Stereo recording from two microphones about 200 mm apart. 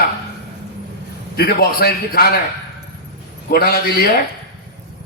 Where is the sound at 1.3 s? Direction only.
50° left (ahead or behind).